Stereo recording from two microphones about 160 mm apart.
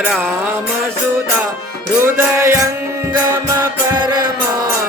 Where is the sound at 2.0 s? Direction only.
15° right (ahead or behind).